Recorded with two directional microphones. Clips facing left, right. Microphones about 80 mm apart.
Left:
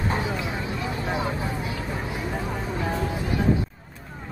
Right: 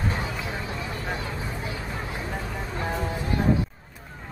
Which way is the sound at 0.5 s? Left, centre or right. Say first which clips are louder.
Left 3 dB; left.